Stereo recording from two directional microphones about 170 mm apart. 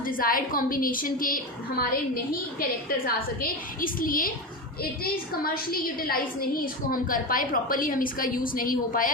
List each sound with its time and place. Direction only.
0.0 s a woman's voice: 55° left (ahead or behind)